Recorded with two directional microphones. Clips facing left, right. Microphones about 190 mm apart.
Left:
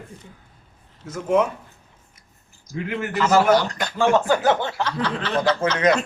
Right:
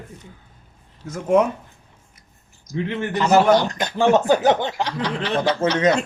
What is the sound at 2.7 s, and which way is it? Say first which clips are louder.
Speech: right 2 dB; 20° right (ahead or behind).